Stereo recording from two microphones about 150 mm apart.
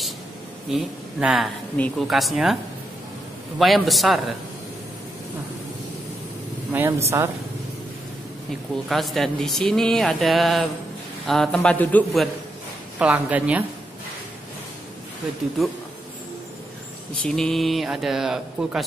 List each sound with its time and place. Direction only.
0.7 s speech: centre (ahead or behind)
6.7 s speech: 15° right (ahead or behind)
8.8 s speech: centre (ahead or behind)
13.0 s speech: 10° right (ahead or behind)
17.2 s speech: 5° left (ahead or behind)